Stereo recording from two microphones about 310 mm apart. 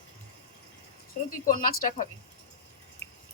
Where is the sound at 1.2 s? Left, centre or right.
Left.